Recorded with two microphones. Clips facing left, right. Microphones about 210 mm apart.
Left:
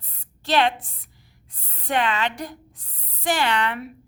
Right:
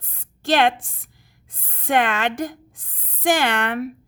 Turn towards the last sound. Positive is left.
turn(degrees=-50)  # may be behind; listen again after turning